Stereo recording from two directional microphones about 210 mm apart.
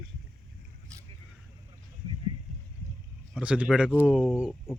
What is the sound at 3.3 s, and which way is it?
Speech, 5° right (ahead or behind).